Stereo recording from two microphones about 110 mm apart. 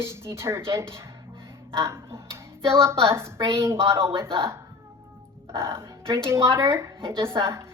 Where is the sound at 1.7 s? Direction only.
25° right (ahead or behind).